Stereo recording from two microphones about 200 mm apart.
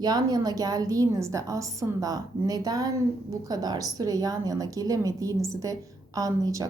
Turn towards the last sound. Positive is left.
turn(degrees=-20)  # may be behind; listen again after turning